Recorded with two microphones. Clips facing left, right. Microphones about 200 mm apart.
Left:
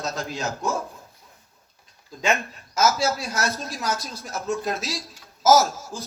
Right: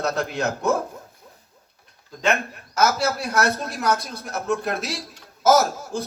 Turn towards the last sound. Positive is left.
turn(degrees=-60)  # may be behind; listen again after turning